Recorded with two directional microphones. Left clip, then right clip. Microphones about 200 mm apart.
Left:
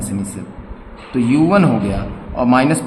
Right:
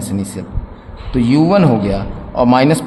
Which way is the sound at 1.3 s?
35° right (ahead or behind).